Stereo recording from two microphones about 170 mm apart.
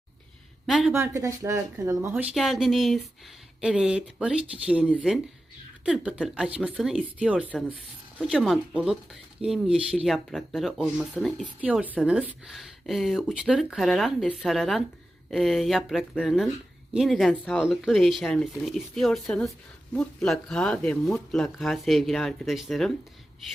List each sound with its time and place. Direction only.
0.7 s speech: centre (ahead or behind)
0.9 s speech: 15° right (ahead or behind)
2.3 s speech: centre (ahead or behind)
7.4 s speech: 10° left (ahead or behind)